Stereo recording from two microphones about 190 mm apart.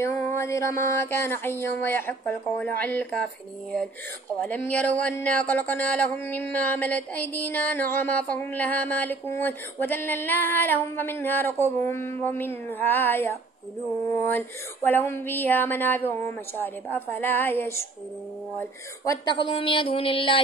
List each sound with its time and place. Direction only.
0.0 s speech: 15° left (ahead or behind)
4.4 s a woman's voice: 10° left (ahead or behind); by 20.3 s 30° left (ahead or behind)